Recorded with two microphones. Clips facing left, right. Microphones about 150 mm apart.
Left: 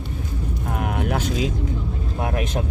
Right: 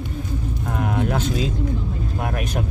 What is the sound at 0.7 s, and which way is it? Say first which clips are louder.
Speech: right 2 dB; 10° left (ahead or behind).